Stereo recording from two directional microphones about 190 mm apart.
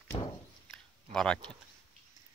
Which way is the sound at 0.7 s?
5° left (ahead or behind).